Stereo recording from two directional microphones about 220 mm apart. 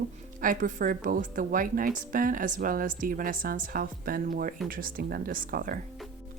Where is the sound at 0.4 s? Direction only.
40° right (ahead or behind).